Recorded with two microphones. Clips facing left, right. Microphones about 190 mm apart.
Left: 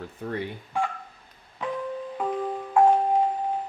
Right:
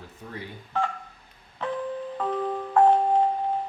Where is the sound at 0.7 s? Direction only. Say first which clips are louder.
Even; 10° left (ahead or behind).